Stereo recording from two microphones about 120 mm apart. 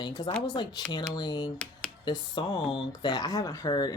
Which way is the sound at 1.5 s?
10° left (ahead or behind).